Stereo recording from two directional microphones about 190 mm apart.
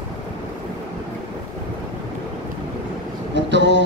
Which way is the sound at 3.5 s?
70° right (ahead or behind).